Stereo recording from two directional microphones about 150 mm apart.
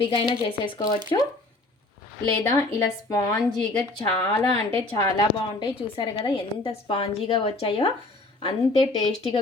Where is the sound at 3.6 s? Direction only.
10° left (ahead or behind).